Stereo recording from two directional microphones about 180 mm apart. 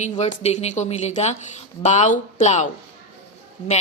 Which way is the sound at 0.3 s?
35° left (ahead or behind).